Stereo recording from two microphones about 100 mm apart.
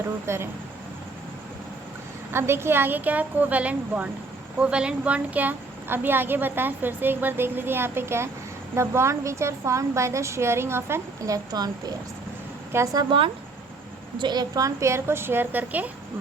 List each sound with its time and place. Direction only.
0.3 s a woman's voice: 25° right (ahead or behind)
2.3 s a woman's voice: 25° right (ahead or behind)
13.1 s speech: 60° right (ahead or behind)
14.2 s a woman's voice: 45° right (ahead or behind); by 15.9 s 15° right (ahead or behind)